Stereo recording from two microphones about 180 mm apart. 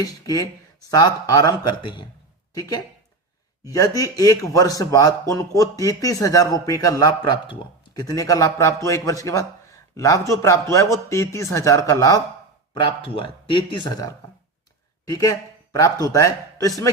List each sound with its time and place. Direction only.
0.0 s speech: 20° left (ahead or behind)
12.7 s speech: 30° left (ahead or behind)